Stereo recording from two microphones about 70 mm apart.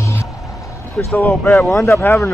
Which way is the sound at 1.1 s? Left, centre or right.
Left.